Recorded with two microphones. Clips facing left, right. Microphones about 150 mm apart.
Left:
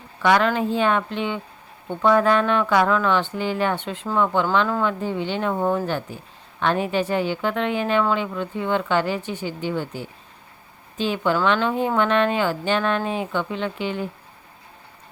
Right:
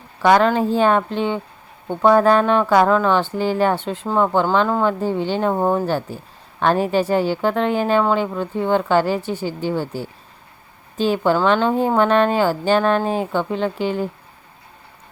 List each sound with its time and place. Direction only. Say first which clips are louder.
0.2 s speech: right 4 dB; 35° right (ahead or behind)